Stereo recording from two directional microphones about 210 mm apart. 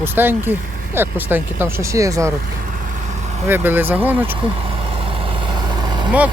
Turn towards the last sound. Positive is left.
turn(degrees=-20)  # may be behind; listen again after turning